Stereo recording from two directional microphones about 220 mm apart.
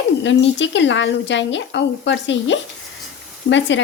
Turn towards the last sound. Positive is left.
turn(degrees=55)  # may be behind; listen again after turning